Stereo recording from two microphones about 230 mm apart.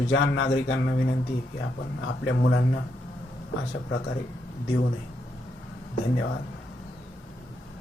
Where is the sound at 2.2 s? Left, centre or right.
Left.